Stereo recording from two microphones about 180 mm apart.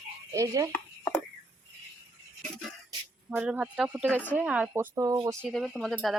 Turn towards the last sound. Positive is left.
turn(degrees=0)  # may be behind; listen again after turning